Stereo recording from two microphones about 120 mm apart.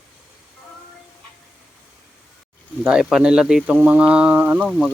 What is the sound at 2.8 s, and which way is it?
Speech, 5° right (ahead or behind).